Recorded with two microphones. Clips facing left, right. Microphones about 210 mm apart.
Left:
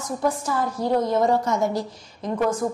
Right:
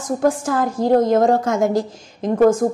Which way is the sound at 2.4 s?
45° right (ahead or behind).